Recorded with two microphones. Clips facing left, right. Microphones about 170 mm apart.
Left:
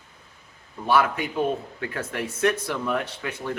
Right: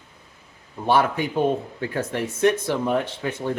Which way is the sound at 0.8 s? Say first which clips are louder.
Right 2 dB; 30° right (ahead or behind).